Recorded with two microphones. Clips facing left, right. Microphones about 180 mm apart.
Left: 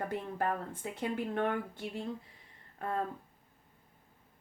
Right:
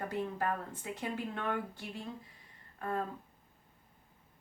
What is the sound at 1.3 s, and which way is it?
Speech, 55° left (ahead or behind).